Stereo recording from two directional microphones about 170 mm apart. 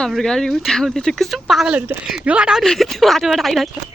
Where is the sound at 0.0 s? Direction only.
5° left (ahead or behind).